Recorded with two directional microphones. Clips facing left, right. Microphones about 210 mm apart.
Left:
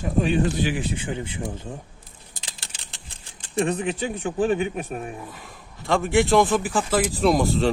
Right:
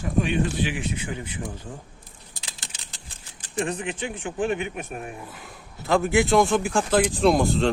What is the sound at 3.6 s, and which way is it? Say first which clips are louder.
Speech: left 4 dB; 35° left (ahead or behind).